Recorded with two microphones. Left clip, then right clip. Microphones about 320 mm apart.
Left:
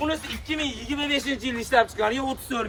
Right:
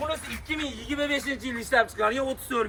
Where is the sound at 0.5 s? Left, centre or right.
Centre.